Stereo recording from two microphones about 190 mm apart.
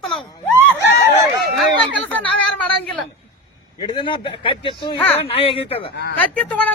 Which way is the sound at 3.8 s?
25° left (ahead or behind).